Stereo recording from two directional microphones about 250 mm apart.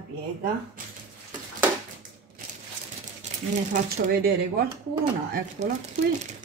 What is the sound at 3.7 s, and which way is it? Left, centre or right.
A woman's voice, right.